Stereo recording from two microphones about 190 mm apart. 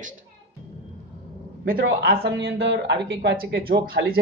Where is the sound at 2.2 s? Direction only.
60° right (ahead or behind).